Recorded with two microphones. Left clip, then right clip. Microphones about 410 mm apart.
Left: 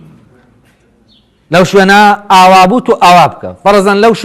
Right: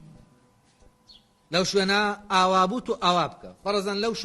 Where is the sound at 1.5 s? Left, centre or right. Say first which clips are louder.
Left 18 dB; left.